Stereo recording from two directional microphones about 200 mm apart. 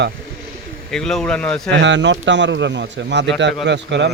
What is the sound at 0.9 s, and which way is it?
Speech, centre (ahead or behind).